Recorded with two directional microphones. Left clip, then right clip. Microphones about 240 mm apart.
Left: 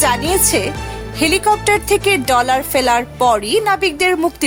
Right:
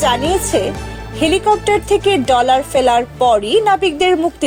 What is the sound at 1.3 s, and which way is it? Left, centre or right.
A woman's voice, left.